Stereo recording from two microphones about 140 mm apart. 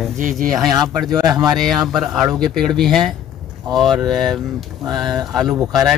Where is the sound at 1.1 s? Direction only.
30° right (ahead or behind).